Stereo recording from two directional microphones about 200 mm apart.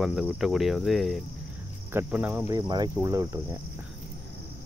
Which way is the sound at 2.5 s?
20° right (ahead or behind).